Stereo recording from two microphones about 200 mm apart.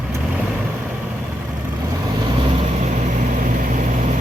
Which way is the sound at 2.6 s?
35° right (ahead or behind).